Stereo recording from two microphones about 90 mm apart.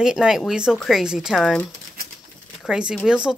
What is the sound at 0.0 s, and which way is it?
Speech, 5° right (ahead or behind).